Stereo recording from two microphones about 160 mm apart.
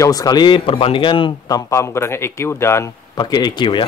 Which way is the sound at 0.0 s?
20° left (ahead or behind).